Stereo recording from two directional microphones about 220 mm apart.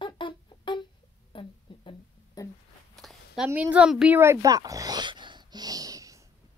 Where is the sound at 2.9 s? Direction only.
Centre (ahead or behind).